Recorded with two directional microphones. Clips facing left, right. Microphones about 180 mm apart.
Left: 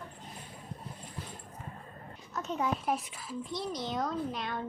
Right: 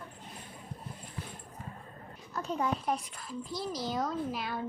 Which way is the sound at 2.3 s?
Centre (ahead or behind).